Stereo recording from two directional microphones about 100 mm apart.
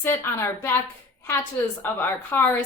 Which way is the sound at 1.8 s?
20° left (ahead or behind).